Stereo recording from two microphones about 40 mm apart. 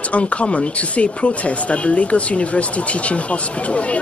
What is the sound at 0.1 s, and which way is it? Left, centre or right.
Speech, left.